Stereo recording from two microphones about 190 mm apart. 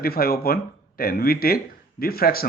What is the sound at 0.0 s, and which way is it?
Speech, 55° left (ahead or behind).